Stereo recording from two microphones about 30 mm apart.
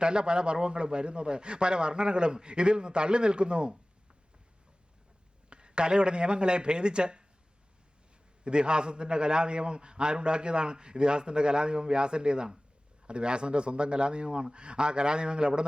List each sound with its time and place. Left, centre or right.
0.0 s a man's voice: right
5.5 s a man's voice: right
8.4 s a man's voice: right